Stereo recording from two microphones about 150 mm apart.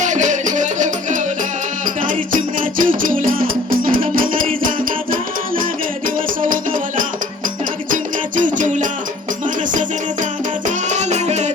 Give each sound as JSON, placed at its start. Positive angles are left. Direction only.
{"t": 0.0, "sound": "music", "side_deg": -55}
{"t": 2.6, "sound": "music", "side_deg": -65}
{"t": 6.4, "sound": "music", "side_deg": -60}
{"t": 8.4, "sound": "music", "side_deg": -60}
{"t": 10.8, "sound": "music", "side_deg": -50}